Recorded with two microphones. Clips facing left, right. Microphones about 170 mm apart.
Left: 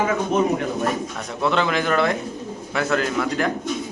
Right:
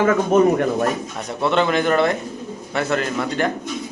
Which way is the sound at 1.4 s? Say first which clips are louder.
Right 3 dB; centre (ahead or behind).